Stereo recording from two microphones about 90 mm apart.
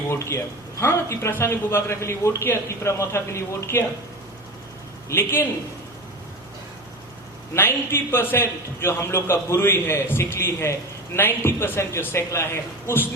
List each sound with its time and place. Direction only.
0.8 s a man's voice: 30° left (ahead or behind)
5.0 s a man's voice: 30° left (ahead or behind)
7.5 s a man's voice: 25° left (ahead or behind)